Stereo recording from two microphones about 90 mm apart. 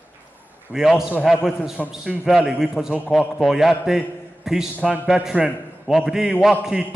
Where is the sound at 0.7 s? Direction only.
5° right (ahead or behind).